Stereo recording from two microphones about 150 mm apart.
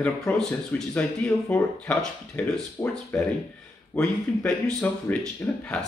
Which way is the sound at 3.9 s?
10° left (ahead or behind).